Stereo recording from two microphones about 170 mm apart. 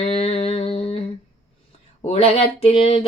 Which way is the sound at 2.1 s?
35° left (ahead or behind).